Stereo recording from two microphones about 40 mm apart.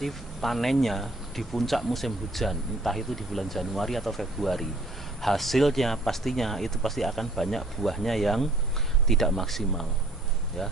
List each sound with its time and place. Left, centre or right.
0.0 s speech: centre